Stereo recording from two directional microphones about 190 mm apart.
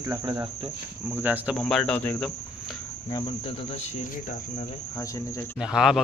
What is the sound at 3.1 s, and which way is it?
Cricket, 20° left (ahead or behind).